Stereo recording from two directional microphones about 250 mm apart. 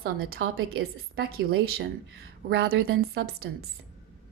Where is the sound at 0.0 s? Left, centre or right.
Right.